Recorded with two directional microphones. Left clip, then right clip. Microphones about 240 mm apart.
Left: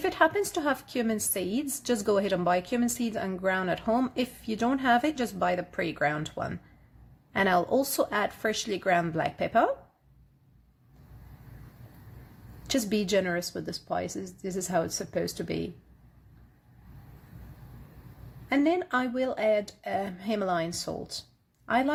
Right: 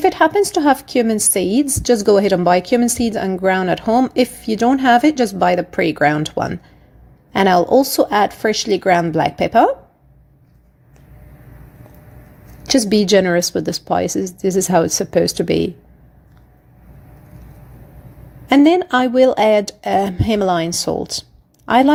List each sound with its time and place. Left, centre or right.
0.0 s a woman's voice: right
12.7 s a woman's voice: right
18.4 s speech: right